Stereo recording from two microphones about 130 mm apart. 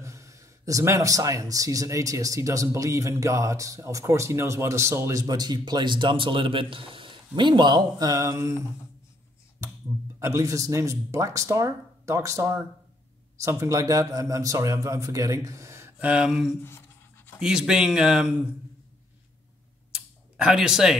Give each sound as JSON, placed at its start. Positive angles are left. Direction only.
{"t": 0.0, "sound": "speech", "side_deg": -25}
{"t": 10.1, "sound": "speech", "side_deg": -20}
{"t": 19.9, "sound": "a sound", "side_deg": -5}